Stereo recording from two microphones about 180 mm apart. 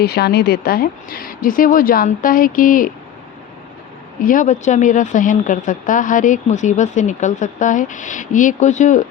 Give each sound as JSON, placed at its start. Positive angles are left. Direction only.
{"t": 0.0, "sound": "a woman's voice", "side_deg": 60}
{"t": 4.2, "sound": "a woman's voice", "side_deg": 50}